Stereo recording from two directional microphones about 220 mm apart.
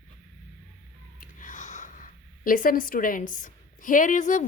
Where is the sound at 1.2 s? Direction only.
35° left (ahead or behind).